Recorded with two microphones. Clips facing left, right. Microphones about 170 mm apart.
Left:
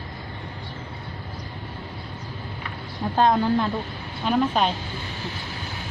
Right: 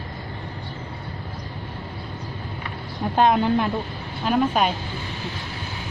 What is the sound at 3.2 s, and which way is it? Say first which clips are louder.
Speech: right 1 dB; 15° right (ahead or behind).